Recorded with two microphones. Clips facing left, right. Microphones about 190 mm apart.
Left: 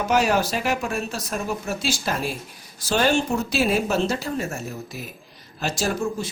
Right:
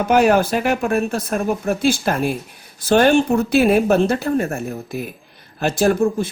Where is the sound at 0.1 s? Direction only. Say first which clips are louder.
Right 7 dB; 55° right (ahead or behind).